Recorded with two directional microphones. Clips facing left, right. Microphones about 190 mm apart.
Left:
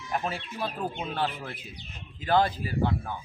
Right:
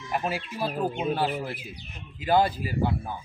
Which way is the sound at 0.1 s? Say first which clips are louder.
Right 2 dB; 5° right (ahead or behind).